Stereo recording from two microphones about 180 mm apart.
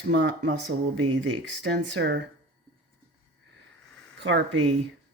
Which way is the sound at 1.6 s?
75° right (ahead or behind).